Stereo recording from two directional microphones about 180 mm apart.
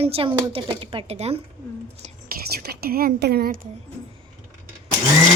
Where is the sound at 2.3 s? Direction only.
60° right (ahead or behind).